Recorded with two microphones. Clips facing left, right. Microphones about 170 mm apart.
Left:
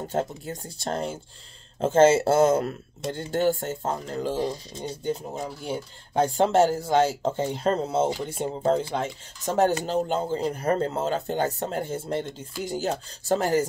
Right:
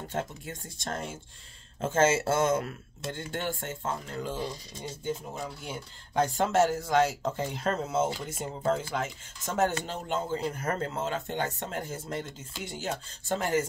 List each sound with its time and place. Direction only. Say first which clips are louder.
0.0 s speech: left 6 dB; 40° left (ahead or behind)